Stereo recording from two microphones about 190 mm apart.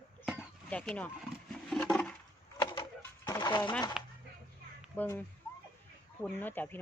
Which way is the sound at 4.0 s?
5° right (ahead or behind).